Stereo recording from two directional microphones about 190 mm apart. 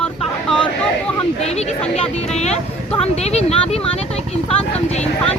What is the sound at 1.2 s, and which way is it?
Speech, 35° left (ahead or behind).